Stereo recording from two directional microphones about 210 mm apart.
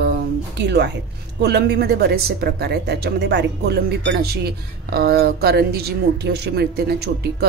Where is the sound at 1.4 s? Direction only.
50° right (ahead or behind).